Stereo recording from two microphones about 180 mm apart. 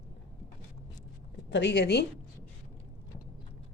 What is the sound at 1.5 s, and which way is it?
Speech, 75° left (ahead or behind).